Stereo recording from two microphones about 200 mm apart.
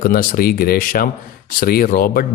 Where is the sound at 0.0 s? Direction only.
45° left (ahead or behind).